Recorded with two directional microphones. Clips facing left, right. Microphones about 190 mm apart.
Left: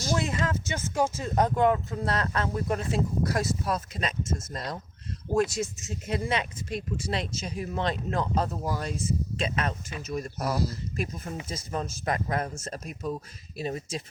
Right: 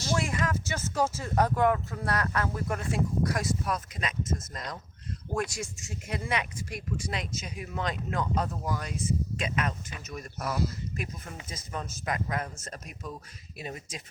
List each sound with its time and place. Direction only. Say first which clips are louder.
0.1 s speech: left 1 dB; 20° left (ahead or behind)